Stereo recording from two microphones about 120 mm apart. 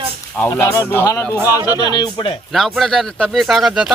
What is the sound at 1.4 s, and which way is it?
Speech, 20° right (ahead or behind).